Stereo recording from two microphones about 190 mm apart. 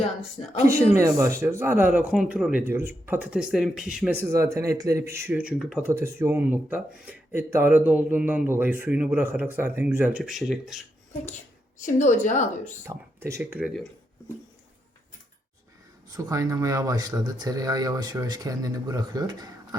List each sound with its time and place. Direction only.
0.4 s a woman's voice: 35° left (ahead or behind)
0.9 s speech: 15° right (ahead or behind)
11.8 s a woman's voice: 40° left (ahead or behind)
12.9 s speech: 15° right (ahead or behind)
16.1 s speech: 15° right (ahead or behind)